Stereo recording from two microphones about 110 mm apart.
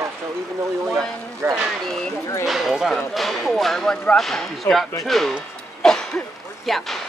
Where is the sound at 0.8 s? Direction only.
5° left (ahead or behind).